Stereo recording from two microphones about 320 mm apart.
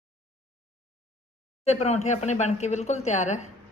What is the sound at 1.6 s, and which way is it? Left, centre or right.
Speech, centre.